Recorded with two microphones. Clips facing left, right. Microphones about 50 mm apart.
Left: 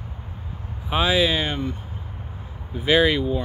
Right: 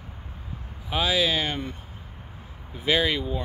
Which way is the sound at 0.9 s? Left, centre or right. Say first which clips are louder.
Left 4 dB; left.